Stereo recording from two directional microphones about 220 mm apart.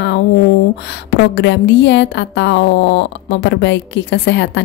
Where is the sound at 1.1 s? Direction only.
50° left (ahead or behind).